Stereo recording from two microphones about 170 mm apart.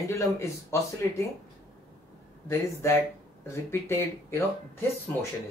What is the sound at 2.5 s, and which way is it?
Speech, 15° left (ahead or behind).